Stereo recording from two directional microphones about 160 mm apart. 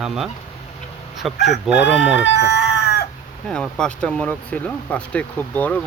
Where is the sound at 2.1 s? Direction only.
90° left.